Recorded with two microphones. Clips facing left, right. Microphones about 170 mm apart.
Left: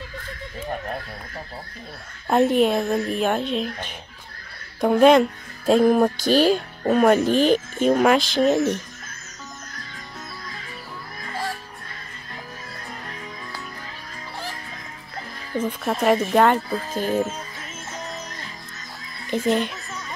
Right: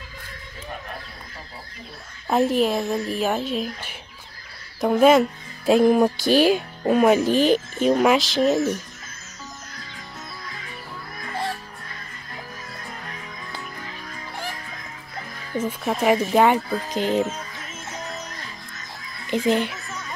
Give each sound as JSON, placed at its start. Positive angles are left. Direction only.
{"t": 2.2, "sound": "speech", "side_deg": 0}
{"t": 15.6, "sound": "speech", "side_deg": -5}
{"t": 19.3, "sound": "speech", "side_deg": -15}